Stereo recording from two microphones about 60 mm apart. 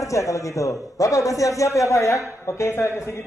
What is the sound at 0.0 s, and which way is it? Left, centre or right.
A man's voice, left.